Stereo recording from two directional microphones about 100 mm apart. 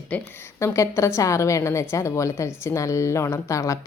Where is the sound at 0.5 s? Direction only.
30° left (ahead or behind).